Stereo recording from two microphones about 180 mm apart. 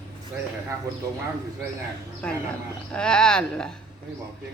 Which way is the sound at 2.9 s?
5° left (ahead or behind).